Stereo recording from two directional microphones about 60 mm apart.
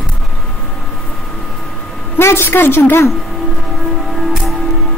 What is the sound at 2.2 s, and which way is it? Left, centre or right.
Speech, left.